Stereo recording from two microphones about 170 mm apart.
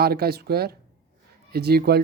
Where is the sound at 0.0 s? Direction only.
65° right (ahead or behind).